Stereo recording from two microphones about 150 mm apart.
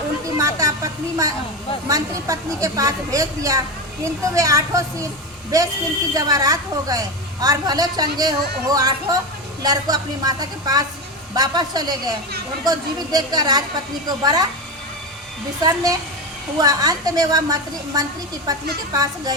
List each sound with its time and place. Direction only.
0.3 s a sound: 20° right (ahead or behind)
1.9 s a woman's voice: 20° right (ahead or behind)
15.6 s a woman's voice: 25° right (ahead or behind)